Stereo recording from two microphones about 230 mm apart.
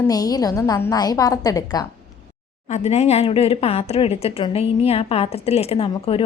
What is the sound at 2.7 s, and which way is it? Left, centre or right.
Speech, left.